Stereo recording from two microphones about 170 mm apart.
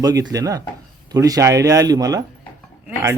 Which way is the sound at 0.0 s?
20° right (ahead or behind).